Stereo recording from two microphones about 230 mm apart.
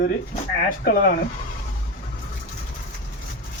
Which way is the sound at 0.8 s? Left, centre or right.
Left.